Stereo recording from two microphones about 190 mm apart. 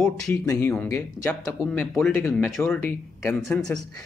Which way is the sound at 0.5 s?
10° left (ahead or behind).